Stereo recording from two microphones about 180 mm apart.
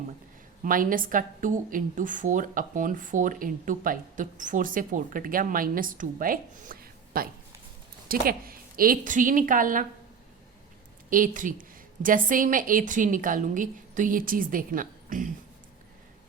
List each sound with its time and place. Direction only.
0.6 s a woman's voice: 50° right (ahead or behind)
11.1 s a woman's voice: 50° right (ahead or behind)